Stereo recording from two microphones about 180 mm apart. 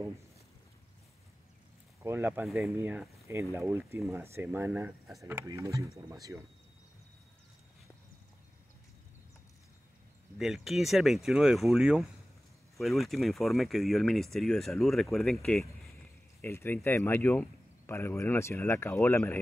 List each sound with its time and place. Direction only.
2.0 s speech: 15° right (ahead or behind)
5.2 s speech: 15° right (ahead or behind)
10.3 s speech: centre (ahead or behind)
16.3 s speech: 15° left (ahead or behind)